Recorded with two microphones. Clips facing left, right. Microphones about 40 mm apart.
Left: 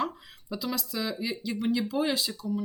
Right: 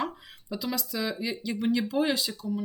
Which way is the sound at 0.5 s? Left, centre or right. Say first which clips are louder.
Right 1 dB; centre.